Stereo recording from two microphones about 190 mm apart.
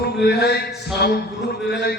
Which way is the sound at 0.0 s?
60° left (ahead or behind).